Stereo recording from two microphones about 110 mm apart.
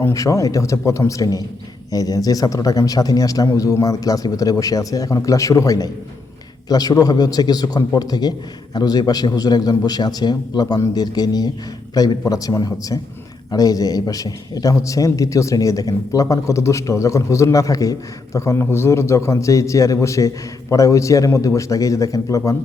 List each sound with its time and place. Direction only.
0.0 s a man's voice: 30° left (ahead or behind)